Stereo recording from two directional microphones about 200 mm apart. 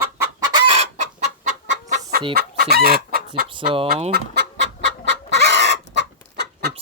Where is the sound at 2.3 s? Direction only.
50° right (ahead or behind).